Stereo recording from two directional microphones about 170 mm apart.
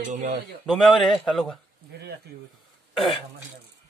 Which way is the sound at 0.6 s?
Centre (ahead or behind).